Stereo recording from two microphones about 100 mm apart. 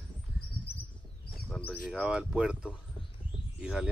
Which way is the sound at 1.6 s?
15° left (ahead or behind).